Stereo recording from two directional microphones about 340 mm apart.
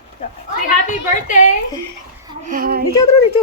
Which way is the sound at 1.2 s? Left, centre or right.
Left.